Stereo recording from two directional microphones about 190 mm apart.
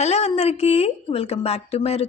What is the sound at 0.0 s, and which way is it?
A woman's voice, 35° left (ahead or behind).